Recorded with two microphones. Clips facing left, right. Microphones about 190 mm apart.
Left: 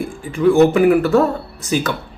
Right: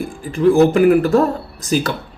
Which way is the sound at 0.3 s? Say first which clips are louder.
Even; 35° right (ahead or behind).